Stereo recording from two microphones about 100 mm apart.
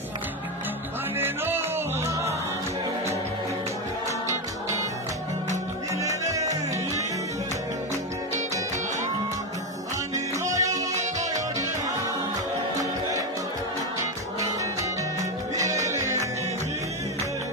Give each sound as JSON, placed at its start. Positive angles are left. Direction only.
{"t": 1.1, "sound": "music", "side_deg": -20}
{"t": 5.9, "sound": "music", "side_deg": -35}
{"t": 10.1, "sound": "music", "side_deg": -35}
{"t": 14.4, "sound": "music", "side_deg": -35}